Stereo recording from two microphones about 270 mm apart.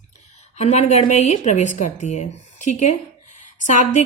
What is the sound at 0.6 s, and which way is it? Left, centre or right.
A woman's voice, left.